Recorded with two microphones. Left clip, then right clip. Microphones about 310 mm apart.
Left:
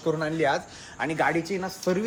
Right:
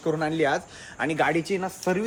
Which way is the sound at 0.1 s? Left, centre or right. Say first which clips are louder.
Right 1 dB; right.